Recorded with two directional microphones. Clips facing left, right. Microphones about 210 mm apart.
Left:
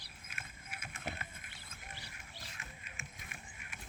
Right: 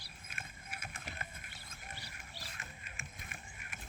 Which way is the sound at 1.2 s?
40° right (ahead or behind).